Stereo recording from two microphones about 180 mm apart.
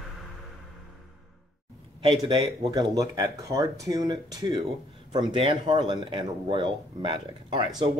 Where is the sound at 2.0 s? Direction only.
25° right (ahead or behind).